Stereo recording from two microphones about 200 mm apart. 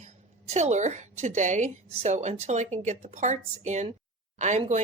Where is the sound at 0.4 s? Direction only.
35° right (ahead or behind).